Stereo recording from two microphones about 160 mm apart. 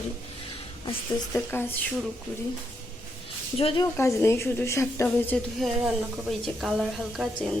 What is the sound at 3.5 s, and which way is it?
Speech, 35° left (ahead or behind).